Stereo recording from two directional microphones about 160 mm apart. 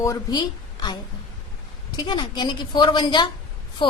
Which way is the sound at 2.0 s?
30° left (ahead or behind).